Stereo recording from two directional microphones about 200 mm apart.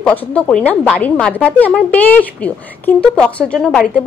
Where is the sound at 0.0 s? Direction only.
10° left (ahead or behind).